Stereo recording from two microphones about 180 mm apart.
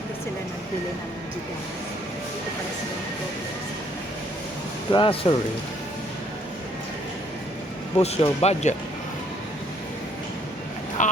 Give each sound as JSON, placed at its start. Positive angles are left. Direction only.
{"t": 4.9, "sound": "speech", "side_deg": 30}
{"t": 7.9, "sound": "speech", "side_deg": 35}
{"t": 11.0, "sound": "a sound", "side_deg": 45}